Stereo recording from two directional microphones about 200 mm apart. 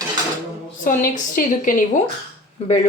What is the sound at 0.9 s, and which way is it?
A woman's voice, 40° left (ahead or behind).